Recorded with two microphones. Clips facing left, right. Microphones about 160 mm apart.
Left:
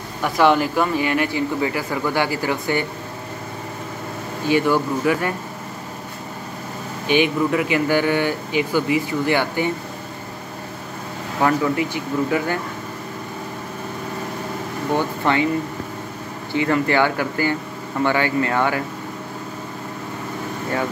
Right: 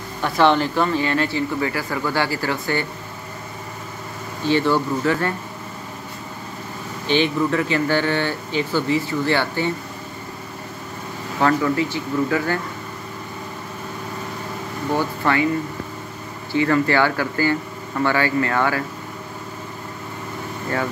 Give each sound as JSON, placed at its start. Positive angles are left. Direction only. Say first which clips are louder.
{"t": 0.2, "sound": "speech", "louder": "left 1 dB", "side_deg": 10}
{"t": 4.5, "sound": "speech", "louder": "even", "side_deg": 10}
{"t": 7.1, "sound": "speech", "louder": "left 1 dB", "side_deg": 15}
{"t": 11.4, "sound": "speech", "louder": "even", "side_deg": 15}
{"t": 15.0, "sound": "speech", "louder": "even", "side_deg": 20}
{"t": 16.5, "sound": "speech", "louder": "right 1 dB", "side_deg": 20}